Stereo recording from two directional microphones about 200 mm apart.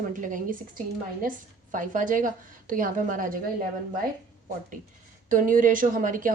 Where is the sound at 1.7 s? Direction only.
40° right (ahead or behind).